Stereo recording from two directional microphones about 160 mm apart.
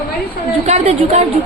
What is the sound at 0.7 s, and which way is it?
Speech, 40° right (ahead or behind).